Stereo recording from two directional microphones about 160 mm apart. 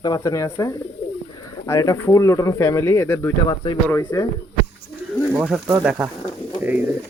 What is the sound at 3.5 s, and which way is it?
Speech, 30° left (ahead or behind).